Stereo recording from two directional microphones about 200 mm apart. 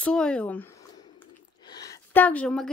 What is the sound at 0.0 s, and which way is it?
Speech, 5° left (ahead or behind).